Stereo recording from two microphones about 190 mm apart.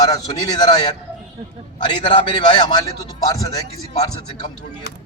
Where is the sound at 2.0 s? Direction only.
25° left (ahead or behind).